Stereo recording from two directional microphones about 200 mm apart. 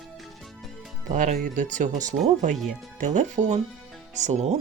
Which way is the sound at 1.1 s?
40° right (ahead or behind).